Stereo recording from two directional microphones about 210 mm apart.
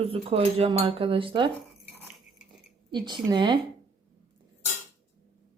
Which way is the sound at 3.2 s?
20° right (ahead or behind).